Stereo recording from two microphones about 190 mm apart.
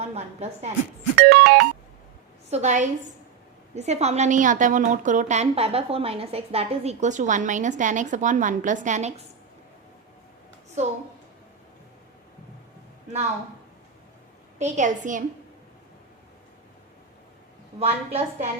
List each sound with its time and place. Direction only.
0.0 s a woman's voice: 35° right (ahead or behind)
1.1 s music: 55° right (ahead or behind)
2.5 s a woman's voice: 40° right (ahead or behind)
10.8 s a woman's voice: 35° right (ahead or behind)
14.6 s a woman's voice: 40° right (ahead or behind)
17.7 s a woman's voice: 30° right (ahead or behind)